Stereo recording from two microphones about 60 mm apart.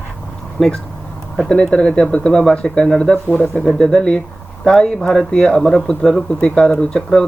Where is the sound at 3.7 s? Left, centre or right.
Centre.